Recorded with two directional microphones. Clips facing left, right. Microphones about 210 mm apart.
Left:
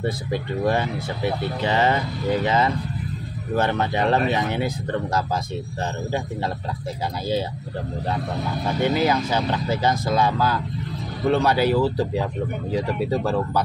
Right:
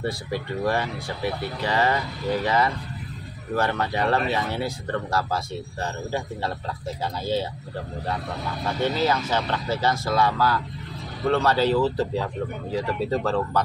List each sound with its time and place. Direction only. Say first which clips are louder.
0.0 s speech: left 3 dB; 20° left (ahead or behind)
8.8 s speech: left 3 dB; 15° left (ahead or behind)